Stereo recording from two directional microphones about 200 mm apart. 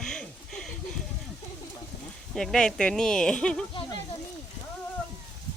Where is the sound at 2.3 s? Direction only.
Centre (ahead or behind).